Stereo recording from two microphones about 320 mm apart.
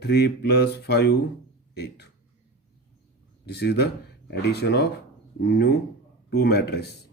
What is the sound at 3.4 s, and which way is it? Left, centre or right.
Speech, left.